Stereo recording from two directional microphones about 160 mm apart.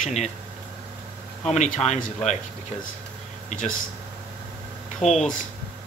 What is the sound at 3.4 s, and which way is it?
Speech, 50° left (ahead or behind).